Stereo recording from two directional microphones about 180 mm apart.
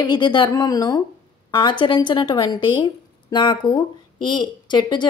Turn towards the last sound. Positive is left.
turn(degrees=25)  # may be behind; listen again after turning